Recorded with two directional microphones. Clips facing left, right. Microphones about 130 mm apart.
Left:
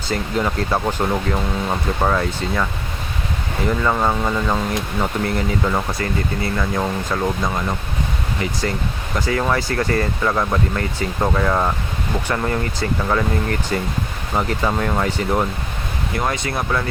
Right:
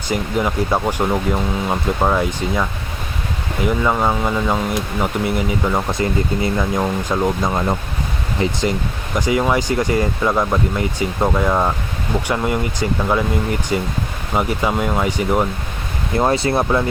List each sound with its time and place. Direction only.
0.1 s speech: 10° right (ahead or behind)
3.7 s speech: 10° right (ahead or behind); by 8.5 s 30° right (ahead or behind)
9.1 s speech: 15° right (ahead or behind)
16.1 s speech: 30° right (ahead or behind)